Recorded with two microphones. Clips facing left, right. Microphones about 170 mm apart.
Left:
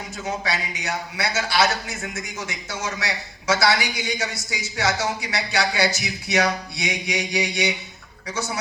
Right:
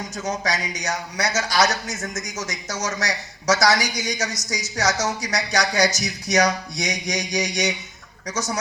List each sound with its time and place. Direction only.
0.2 s a man's voice: 40° right (ahead or behind)